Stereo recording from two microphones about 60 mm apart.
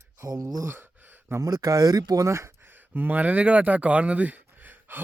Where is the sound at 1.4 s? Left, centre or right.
Right.